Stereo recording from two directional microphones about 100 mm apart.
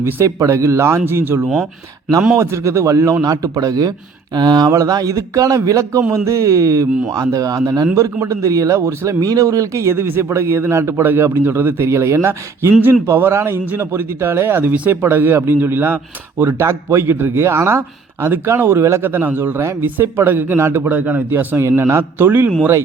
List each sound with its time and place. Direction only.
0.0 s speech: 30° right (ahead or behind)